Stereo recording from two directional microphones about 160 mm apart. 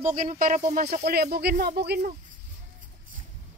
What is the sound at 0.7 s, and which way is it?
Speech, 70° right (ahead or behind).